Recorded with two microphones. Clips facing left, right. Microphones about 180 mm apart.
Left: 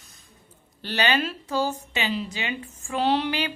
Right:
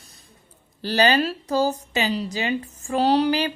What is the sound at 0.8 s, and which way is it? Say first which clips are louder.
Speech: right 5 dB; 35° right (ahead or behind).